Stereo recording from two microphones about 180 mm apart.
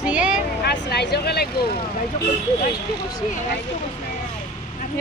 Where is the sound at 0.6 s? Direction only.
65° left (ahead or behind).